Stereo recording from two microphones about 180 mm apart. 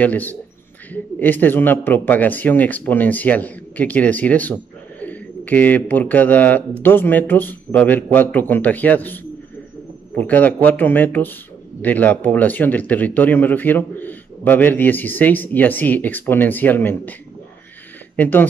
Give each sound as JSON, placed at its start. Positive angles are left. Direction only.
{"t": 0.0, "sound": "a man's voice", "side_deg": 10}
{"t": 18.1, "sound": "speech", "side_deg": 10}